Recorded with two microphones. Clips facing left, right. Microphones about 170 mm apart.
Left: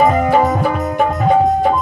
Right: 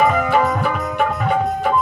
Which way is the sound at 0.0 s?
35° left (ahead or behind).